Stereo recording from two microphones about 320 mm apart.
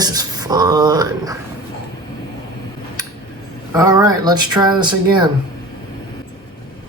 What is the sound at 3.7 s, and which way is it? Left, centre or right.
Speech, centre.